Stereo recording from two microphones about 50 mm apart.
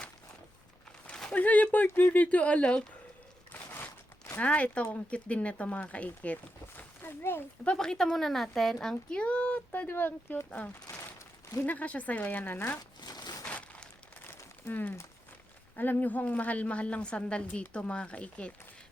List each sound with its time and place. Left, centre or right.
1.3 s a woman's voice: left
3.5 s a sound: left
4.4 s a woman's voice: left
7.2 s speech: left
7.8 s a woman's voice: centre
9.9 s speech: left
11.6 s speech: left
13.4 s crumpling: left
14.7 s a woman's voice: left